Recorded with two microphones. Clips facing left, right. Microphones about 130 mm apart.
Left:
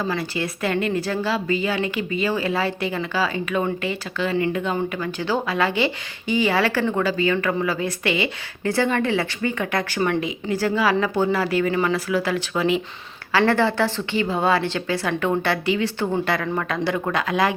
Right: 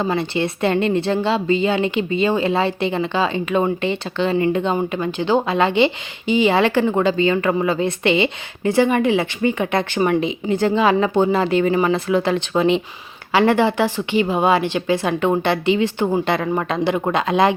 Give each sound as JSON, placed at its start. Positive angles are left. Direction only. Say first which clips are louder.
{"t": 0.0, "sound": "speech", "louder": "right 5 dB", "side_deg": -25}